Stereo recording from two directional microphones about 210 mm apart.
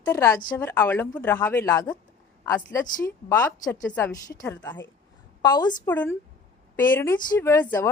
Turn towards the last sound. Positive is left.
turn(degrees=15)  # may be behind; listen again after turning